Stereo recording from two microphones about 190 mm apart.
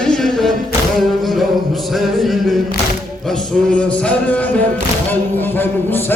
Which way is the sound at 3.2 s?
5° left (ahead or behind).